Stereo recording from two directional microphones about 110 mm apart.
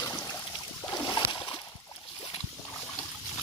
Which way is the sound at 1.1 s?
45° left (ahead or behind).